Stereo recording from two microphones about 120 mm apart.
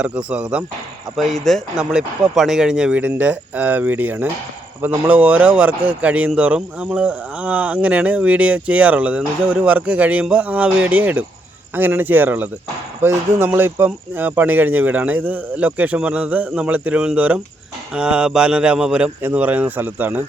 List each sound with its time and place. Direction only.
0.0 s a man's voice: 10° right (ahead or behind)
1.1 s a man's voice: centre (ahead or behind); by 20.2 s 15° right (ahead or behind)